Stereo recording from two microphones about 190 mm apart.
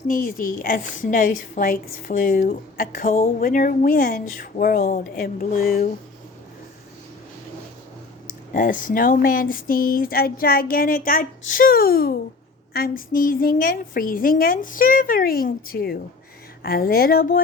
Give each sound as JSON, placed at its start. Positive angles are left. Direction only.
{"t": 0.1, "sound": "a woman's voice", "side_deg": 45}
{"t": 8.5, "sound": "a woman's voice", "side_deg": 45}